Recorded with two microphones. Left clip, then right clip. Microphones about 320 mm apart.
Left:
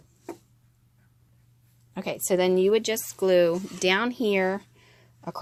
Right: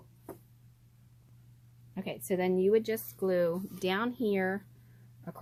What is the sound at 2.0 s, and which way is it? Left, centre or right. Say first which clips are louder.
Speech: left 9 dB; centre.